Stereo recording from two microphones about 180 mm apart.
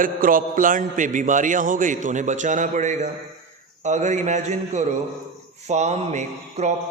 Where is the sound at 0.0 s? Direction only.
50° right (ahead or behind).